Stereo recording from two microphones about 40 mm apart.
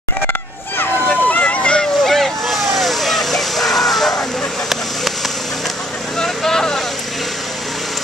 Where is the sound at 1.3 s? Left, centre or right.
Left.